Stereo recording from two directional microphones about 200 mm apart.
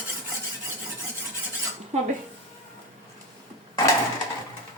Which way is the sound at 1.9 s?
35° right (ahead or behind).